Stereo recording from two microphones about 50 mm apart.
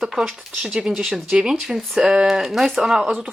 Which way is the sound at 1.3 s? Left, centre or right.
Centre.